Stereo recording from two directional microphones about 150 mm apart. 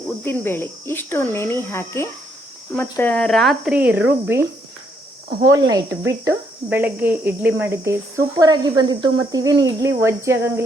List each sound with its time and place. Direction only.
0.3 s speech: 15° left (ahead or behind); by 4.4 s 15° right (ahead or behind)
5.5 s a woman's voice: 25° right (ahead or behind)
6.7 s a woman's voice: 15° right (ahead or behind)